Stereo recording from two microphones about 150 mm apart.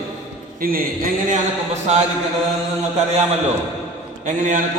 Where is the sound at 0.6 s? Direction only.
75° right (ahead or behind); by 2.0 s 50° right (ahead or behind).